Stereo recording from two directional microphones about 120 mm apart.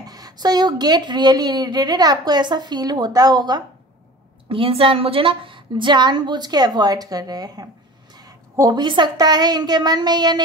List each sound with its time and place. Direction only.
0.0 s speech: 30° right (ahead or behind)
4.5 s speech: 50° right (ahead or behind); by 7.6 s 30° right (ahead or behind)
8.2 s a sound: 30° right (ahead or behind)
9.1 s speech: 35° right (ahead or behind)